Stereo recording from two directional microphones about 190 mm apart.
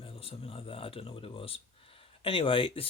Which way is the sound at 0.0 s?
30° left (ahead or behind).